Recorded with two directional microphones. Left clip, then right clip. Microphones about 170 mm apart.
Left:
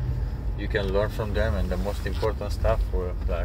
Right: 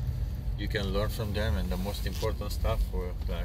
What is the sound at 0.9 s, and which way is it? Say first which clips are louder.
Speech: left 7 dB; 20° right (ahead or behind).